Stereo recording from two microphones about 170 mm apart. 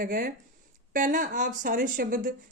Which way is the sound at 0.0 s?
55° right (ahead or behind).